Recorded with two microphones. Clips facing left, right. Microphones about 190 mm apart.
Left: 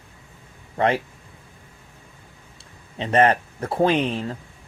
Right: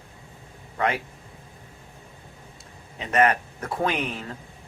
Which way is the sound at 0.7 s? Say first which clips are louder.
Left 5 dB; 30° left (ahead or behind).